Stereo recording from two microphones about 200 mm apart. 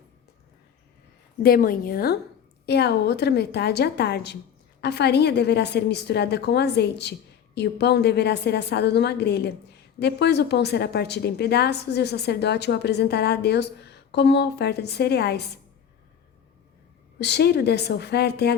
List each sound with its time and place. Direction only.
1.4 s a woman's voice: 50° left (ahead or behind)
17.2 s a woman's voice: 55° left (ahead or behind)